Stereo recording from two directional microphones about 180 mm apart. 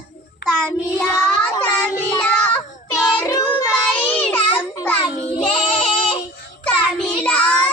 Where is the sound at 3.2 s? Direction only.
20° left (ahead or behind).